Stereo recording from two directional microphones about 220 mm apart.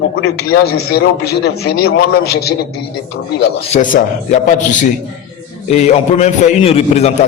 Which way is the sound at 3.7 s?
35° left (ahead or behind).